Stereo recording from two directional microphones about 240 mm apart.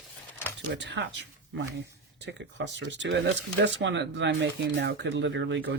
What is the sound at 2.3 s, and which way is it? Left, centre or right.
Speech, right.